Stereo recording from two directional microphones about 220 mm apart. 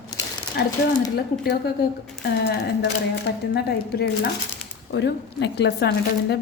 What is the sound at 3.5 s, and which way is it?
Speech, 45° left (ahead or behind).